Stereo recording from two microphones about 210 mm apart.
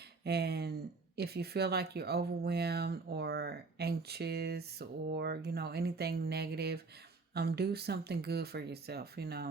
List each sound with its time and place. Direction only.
0.3 s speech: 50° right (ahead or behind)